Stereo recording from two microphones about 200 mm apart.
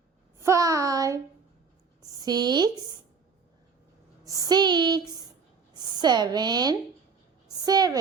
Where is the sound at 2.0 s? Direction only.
20° right (ahead or behind).